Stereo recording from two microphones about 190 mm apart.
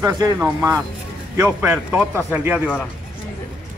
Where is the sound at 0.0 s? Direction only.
20° right (ahead or behind).